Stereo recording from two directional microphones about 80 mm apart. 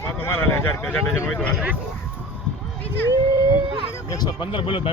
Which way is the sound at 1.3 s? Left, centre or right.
Centre.